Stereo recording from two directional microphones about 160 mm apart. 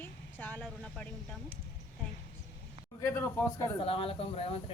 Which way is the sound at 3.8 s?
35° left (ahead or behind).